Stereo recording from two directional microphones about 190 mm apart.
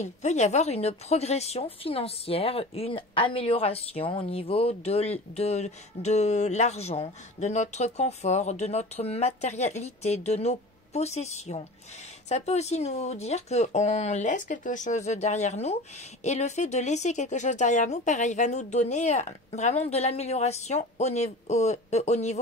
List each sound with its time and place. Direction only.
0.0 s speech: 35° left (ahead or behind)